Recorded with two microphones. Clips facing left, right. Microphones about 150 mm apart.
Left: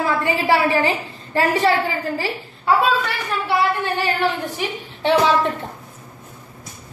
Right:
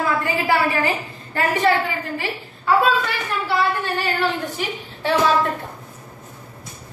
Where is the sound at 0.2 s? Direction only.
30° left (ahead or behind).